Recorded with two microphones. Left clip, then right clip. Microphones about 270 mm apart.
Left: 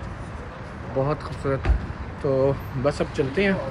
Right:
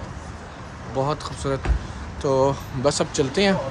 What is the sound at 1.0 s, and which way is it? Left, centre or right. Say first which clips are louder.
Speech: right 1 dB; centre.